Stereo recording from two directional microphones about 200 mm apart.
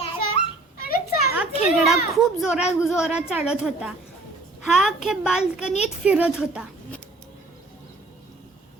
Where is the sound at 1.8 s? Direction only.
Centre (ahead or behind).